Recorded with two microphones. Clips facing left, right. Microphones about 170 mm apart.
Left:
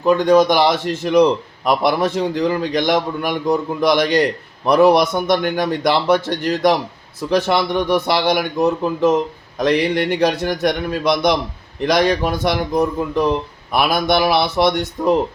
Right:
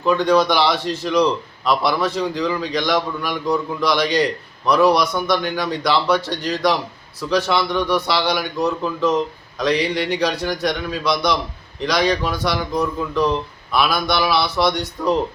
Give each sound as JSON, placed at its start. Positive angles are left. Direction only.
{"t": 0.0, "sound": "speech", "side_deg": 45}